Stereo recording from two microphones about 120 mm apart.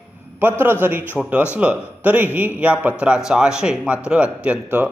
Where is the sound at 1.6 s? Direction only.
10° right (ahead or behind).